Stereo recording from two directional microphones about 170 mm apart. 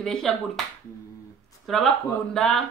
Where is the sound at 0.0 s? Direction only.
Centre (ahead or behind).